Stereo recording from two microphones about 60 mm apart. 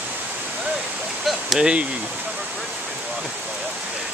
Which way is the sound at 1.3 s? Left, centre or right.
Centre.